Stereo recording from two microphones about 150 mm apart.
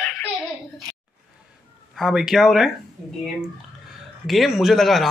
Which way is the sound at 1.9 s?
Centre (ahead or behind).